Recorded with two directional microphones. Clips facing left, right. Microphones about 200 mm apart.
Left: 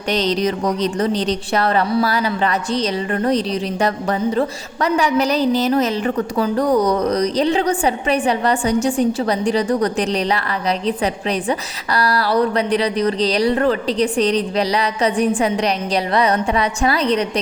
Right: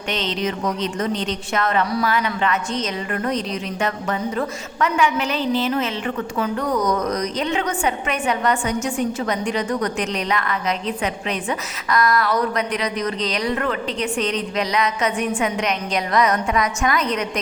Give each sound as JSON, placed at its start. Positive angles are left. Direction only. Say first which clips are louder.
{"t": 0.1, "sound": "a woman's voice", "louder": "left 6 dB", "side_deg": 40}